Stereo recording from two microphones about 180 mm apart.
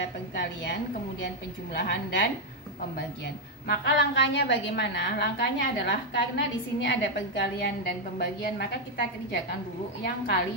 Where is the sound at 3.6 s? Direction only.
65° left (ahead or behind).